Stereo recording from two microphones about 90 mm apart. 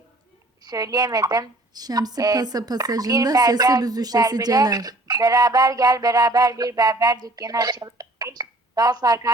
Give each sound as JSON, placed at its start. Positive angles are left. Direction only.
{"t": 0.6, "sound": "speech", "side_deg": -45}